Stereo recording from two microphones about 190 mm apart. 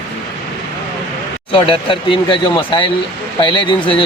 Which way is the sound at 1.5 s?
25° left (ahead or behind).